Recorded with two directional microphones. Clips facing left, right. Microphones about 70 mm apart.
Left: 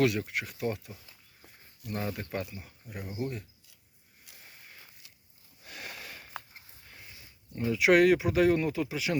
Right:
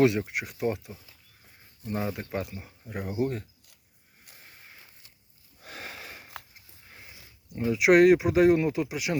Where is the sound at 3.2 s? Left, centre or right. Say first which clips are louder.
Right 7 dB; right.